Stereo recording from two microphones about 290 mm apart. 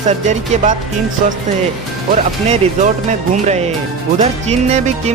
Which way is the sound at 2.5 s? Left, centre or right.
Right.